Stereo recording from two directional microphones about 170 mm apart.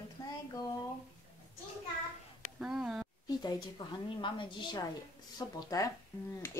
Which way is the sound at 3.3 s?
20° left (ahead or behind).